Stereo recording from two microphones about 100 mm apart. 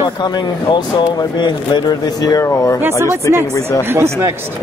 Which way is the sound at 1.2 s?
45° left (ahead or behind).